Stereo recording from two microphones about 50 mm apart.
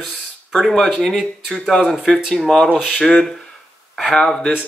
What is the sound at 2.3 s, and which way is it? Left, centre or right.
Speech, centre.